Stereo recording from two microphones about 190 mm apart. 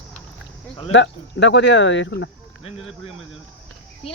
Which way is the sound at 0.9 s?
70° left (ahead or behind).